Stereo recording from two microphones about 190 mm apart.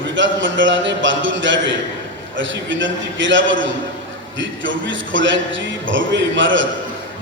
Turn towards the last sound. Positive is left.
turn(degrees=-75)  # may be behind; listen again after turning